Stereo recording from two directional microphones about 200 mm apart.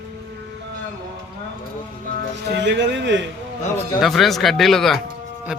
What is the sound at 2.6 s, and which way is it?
Speech, 60° right (ahead or behind).